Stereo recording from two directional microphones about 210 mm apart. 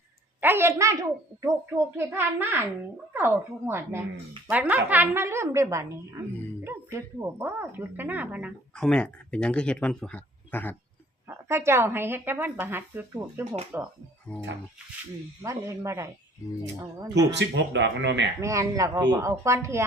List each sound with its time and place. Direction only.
0.4 s a woman's voice: 10° right (ahead or behind); by 10.8 s 10° left (ahead or behind)
11.3 s a woman's voice: 10° right (ahead or behind)
14.3 s speech: 10° left (ahead or behind)
15.4 s a woman's voice: 15° right (ahead or behind)
17.3 s speech: 55° right (ahead or behind)
18.4 s a woman's voice: 15° right (ahead or behind)